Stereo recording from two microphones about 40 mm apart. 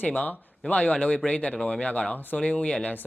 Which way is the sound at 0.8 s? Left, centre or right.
Left.